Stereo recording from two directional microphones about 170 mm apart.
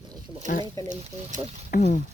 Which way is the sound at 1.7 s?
45° left (ahead or behind).